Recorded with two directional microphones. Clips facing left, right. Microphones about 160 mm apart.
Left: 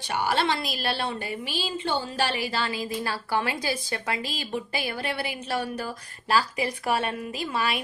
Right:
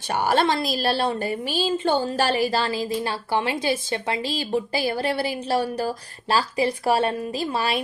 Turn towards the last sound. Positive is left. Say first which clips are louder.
# right 4 dB
turn(degrees=-30)  # may be behind; listen again after turning